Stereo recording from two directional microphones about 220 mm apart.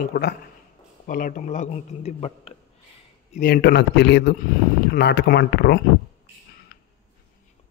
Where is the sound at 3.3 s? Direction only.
40° left (ahead or behind).